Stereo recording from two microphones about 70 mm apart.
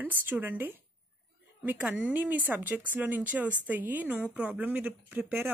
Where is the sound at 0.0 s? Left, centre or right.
Right.